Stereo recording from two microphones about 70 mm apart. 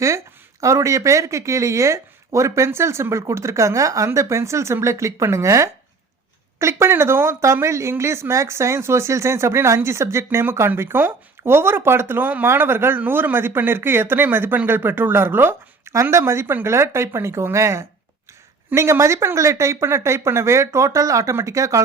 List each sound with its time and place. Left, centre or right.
0.6 s speech: right